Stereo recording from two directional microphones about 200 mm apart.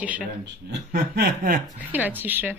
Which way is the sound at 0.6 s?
50° right (ahead or behind).